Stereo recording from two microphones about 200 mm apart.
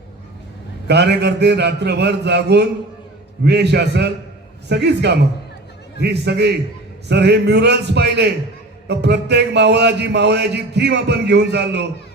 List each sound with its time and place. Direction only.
0.9 s speech: 55° right (ahead or behind)